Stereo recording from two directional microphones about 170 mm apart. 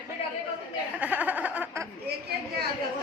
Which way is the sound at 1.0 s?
10° right (ahead or behind).